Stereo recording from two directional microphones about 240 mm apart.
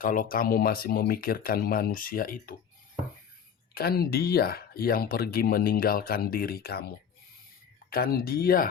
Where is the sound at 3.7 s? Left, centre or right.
Left.